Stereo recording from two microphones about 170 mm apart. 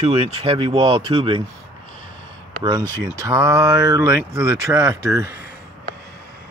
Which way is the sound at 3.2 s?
20° right (ahead or behind).